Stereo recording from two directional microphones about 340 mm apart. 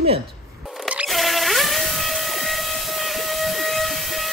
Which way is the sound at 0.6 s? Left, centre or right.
Centre.